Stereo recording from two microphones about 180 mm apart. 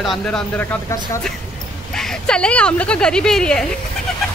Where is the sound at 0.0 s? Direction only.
Centre (ahead or behind).